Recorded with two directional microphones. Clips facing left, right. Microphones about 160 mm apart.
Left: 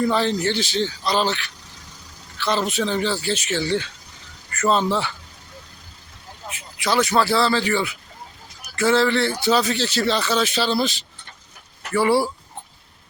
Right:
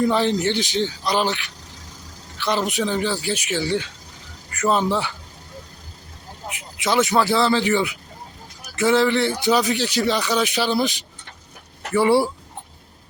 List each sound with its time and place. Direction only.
0.0 s speech: 15° right (ahead or behind)
6.5 s speech: 20° right (ahead or behind)